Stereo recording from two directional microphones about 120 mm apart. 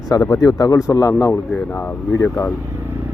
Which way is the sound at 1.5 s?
10° left (ahead or behind).